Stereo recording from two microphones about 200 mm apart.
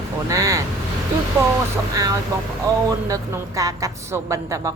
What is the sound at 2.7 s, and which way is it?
Speech, 15° right (ahead or behind).